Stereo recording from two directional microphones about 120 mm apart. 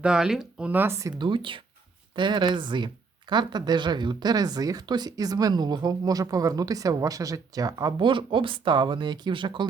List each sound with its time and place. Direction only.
0.0 s speech: 5° right (ahead or behind)
0.7 s speech: 20° right (ahead or behind)
1.2 s speech: 45° right (ahead or behind)